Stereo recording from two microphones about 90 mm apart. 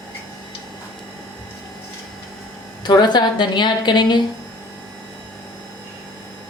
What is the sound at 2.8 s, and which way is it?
Speech, 55° left (ahead or behind).